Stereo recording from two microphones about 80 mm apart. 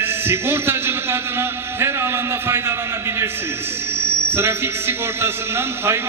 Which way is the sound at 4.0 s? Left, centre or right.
Right.